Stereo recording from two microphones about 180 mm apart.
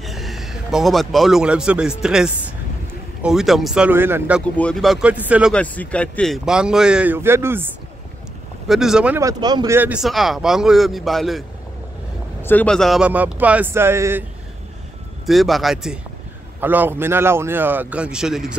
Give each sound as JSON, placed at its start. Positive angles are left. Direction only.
{"t": 0.0, "sound": "a man's voice", "side_deg": 0}
{"t": 4.6, "sound": "a man's voice", "side_deg": 5}
{"t": 5.5, "sound": "a man's voice", "side_deg": 5}
{"t": 9.2, "sound": "speech", "side_deg": -20}
{"t": 9.8, "sound": "a man's voice", "side_deg": -5}
{"t": 12.4, "sound": "speech", "side_deg": 5}
{"t": 15.2, "sound": "a man's voice", "side_deg": 0}